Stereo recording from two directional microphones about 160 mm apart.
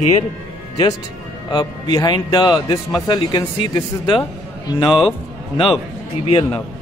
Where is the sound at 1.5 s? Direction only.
25° left (ahead or behind).